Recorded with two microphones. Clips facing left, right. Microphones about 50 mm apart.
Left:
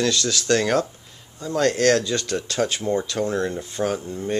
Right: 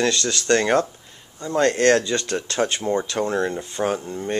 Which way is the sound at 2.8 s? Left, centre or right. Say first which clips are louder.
Right 1 dB; centre.